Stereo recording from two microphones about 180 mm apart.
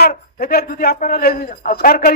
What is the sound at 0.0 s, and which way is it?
A man's voice, 60° left (ahead or behind).